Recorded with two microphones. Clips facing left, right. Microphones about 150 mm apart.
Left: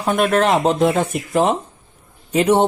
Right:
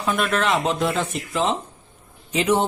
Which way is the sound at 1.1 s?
55° left (ahead or behind).